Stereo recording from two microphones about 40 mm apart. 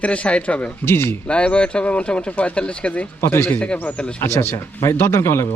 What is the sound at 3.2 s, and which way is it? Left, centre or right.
Speech, left.